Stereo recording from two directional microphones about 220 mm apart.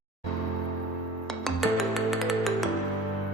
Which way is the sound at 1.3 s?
Centre (ahead or behind).